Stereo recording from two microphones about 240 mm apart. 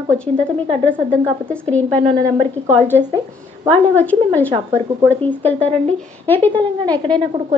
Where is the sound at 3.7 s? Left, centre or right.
Centre.